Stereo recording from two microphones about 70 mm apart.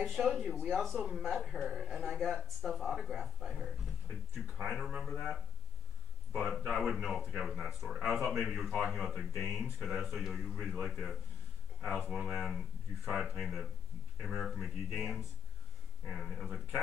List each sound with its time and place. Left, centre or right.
0.0 s speech: centre
0.9 s speech: centre
1.2 s speech: centre
4.6 s speech: centre